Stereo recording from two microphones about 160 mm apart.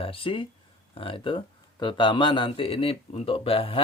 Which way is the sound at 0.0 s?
35° left (ahead or behind).